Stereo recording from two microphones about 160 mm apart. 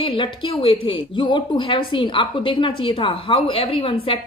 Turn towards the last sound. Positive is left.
turn(degrees=35)  # may be behind; listen again after turning